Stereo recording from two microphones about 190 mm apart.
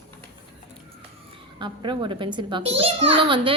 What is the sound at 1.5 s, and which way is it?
A child's voice, 25° right (ahead or behind).